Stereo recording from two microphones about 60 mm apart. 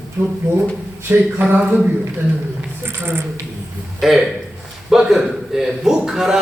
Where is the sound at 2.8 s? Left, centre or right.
Right.